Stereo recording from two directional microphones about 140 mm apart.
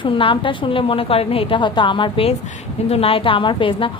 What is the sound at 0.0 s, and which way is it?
A woman's voice, 40° left (ahead or behind).